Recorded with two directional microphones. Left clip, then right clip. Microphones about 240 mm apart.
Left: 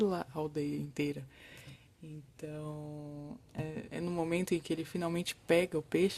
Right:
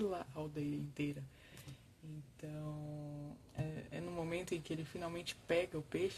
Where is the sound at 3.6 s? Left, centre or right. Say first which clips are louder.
Left 6 dB; left.